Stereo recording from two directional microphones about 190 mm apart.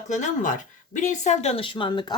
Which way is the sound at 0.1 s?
40° left (ahead or behind).